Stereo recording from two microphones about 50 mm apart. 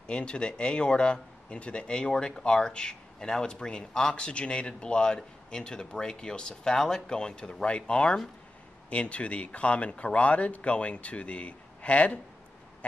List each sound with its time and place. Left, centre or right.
0.0 s speech: centre